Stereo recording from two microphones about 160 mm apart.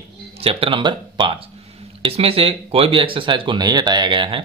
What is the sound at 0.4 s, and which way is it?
Speech, 35° right (ahead or behind).